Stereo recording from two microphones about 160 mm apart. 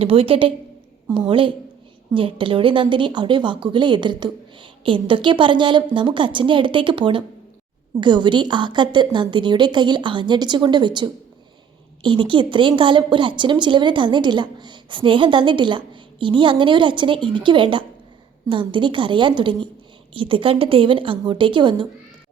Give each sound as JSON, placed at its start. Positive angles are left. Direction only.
{"t": 0.0, "sound": "a woman's voice", "side_deg": -35}